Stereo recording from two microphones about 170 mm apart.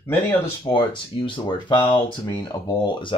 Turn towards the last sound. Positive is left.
turn(degrees=25)  # may be behind; listen again after turning